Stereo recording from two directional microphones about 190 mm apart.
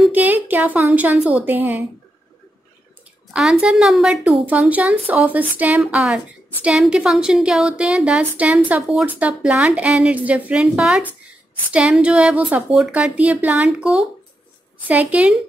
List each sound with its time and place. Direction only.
0.0 s a woman's voice: 10° right (ahead or behind)
3.3 s a woman's voice: centre (ahead or behind)